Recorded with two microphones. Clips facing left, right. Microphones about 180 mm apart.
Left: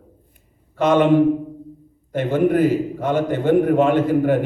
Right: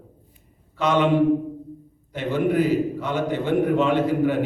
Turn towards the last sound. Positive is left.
turn(degrees=50)  # may be behind; listen again after turning